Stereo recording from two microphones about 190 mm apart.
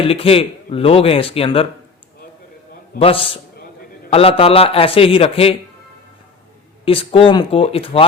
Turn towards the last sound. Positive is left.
turn(degrees=30)  # may be behind; listen again after turning